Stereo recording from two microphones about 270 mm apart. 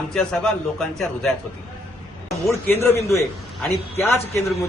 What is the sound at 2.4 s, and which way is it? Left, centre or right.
Speech, centre.